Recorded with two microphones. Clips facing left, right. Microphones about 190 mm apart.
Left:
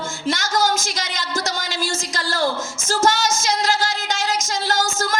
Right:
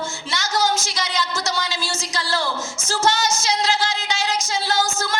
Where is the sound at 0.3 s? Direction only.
50° left (ahead or behind).